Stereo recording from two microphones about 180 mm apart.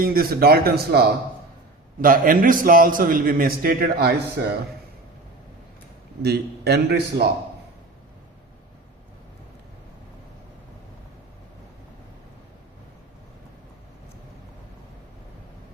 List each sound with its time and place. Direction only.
0.0 s a man's voice: 55° right (ahead or behind)
6.2 s speech: 65° right (ahead or behind)